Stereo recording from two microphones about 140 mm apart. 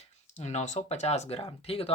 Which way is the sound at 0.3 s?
55° left (ahead or behind).